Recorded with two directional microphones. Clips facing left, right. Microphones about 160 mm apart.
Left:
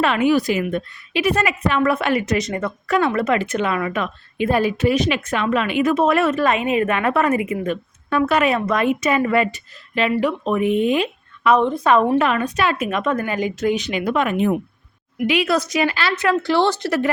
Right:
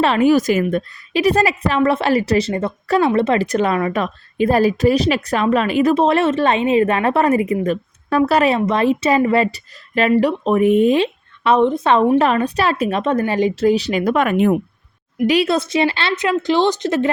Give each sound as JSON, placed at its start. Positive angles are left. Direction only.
{"t": 0.0, "sound": "a woman's voice", "side_deg": -35}
{"t": 10.9, "sound": "speech", "side_deg": -30}
{"t": 12.2, "sound": "a woman's voice", "side_deg": -35}
{"t": 15.3, "sound": "speech", "side_deg": -30}